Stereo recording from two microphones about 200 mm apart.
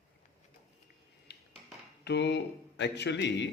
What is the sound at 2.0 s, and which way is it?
Speech, 60° left (ahead or behind).